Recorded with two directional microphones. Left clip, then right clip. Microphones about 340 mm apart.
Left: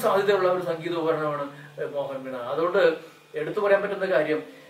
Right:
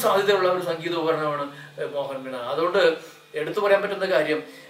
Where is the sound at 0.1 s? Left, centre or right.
Centre.